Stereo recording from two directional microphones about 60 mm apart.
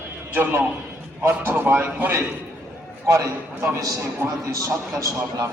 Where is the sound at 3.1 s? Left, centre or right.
Right.